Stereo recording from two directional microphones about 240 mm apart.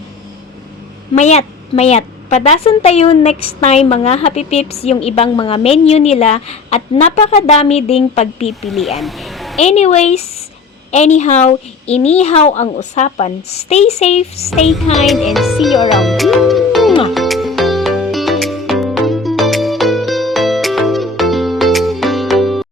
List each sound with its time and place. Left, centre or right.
1.1 s a woman's voice: left
9.0 s music: centre
9.6 s a woman's voice: left
14.9 s speech: centre
15.9 s music: centre